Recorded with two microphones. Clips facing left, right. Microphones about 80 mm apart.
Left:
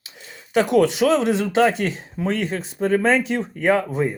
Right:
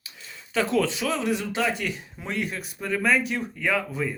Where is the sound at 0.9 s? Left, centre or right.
Left.